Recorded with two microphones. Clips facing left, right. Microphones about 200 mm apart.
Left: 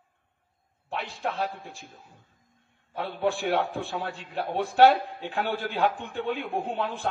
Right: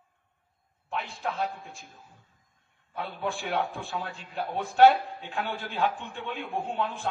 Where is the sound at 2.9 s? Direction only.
65° left (ahead or behind).